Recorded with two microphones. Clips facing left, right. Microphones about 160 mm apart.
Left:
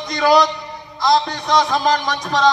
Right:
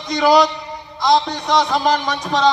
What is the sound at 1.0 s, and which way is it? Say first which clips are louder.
Speech: right 1 dB; 15° right (ahead or behind).